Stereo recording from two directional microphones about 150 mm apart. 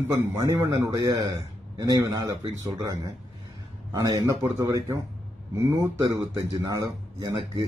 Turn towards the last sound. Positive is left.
turn(degrees=-25)  # may be behind; listen again after turning